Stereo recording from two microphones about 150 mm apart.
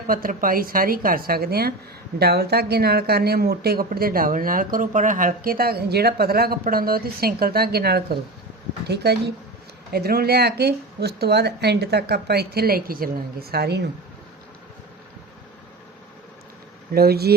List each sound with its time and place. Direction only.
0.1 s a woman's voice: 70° right (ahead or behind); by 8.0 s 90° right
9.1 s speech: 90° right
16.9 s speech: 90° right